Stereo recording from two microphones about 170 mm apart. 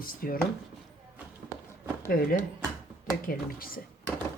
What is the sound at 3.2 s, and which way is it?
Speech, 60° left (ahead or behind).